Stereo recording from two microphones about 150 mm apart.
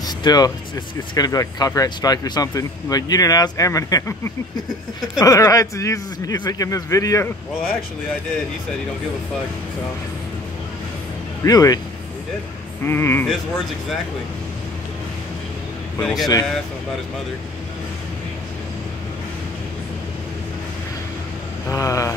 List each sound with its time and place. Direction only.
0.0 s music: 25° left (ahead or behind)
1.1 s speech: 25° left (ahead or behind)
11.4 s speech: 25° left (ahead or behind)
12.8 s speech: 15° left (ahead or behind)
16.0 s speech: centre (ahead or behind)
21.6 s speech: 20° left (ahead or behind)